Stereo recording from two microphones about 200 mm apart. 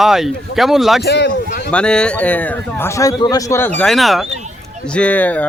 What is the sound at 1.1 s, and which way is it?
Speech, 55° left (ahead or behind).